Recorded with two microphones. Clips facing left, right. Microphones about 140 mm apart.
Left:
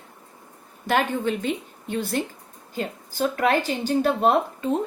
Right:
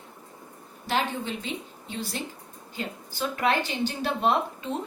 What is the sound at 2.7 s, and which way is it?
A woman's voice, 45° left (ahead or behind).